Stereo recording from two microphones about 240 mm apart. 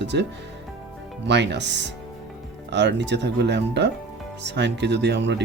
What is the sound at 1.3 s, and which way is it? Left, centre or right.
Speech, right.